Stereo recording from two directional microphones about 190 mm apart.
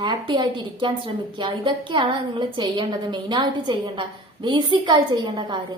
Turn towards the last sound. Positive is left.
turn(degrees=-25)  # may be behind; listen again after turning